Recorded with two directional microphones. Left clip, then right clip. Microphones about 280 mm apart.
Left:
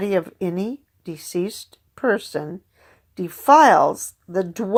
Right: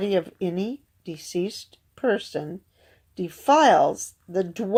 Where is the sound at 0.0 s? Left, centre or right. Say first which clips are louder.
Left 2 dB; centre.